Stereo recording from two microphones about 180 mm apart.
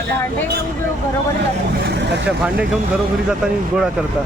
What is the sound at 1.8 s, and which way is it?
Vehicle, 70° right (ahead or behind).